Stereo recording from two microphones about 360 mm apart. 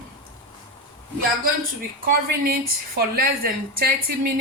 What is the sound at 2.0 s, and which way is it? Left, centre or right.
A woman's voice, right.